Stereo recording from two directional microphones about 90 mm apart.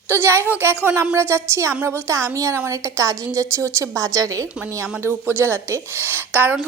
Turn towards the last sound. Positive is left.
turn(degrees=-20)  # may be behind; listen again after turning